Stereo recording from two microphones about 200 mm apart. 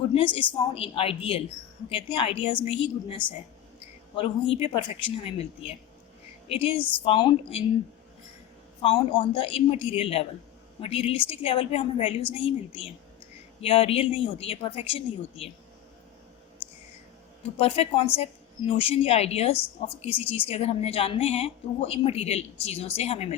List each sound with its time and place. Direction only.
0.1 s a woman's voice: 25° left (ahead or behind)
4.5 s a woman's voice: 25° left (ahead or behind)
8.8 s a woman's voice: 25° left (ahead or behind)
17.6 s a woman's voice: 30° left (ahead or behind)